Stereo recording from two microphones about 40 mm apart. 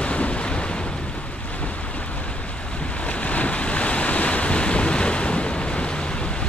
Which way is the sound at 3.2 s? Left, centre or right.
Left.